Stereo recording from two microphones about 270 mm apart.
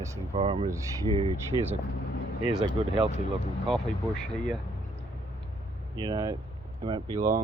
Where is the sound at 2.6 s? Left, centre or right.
Centre.